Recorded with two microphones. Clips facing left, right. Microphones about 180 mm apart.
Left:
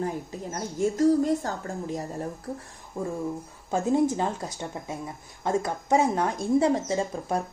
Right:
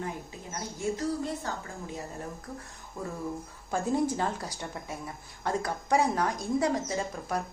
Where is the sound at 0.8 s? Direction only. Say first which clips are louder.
Left 10 dB; 45° left (ahead or behind).